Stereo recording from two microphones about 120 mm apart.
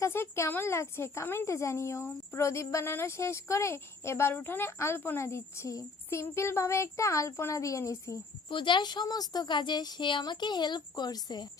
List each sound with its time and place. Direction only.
0.0 s speech: 20° left (ahead or behind)
8.4 s speech: 40° left (ahead or behind)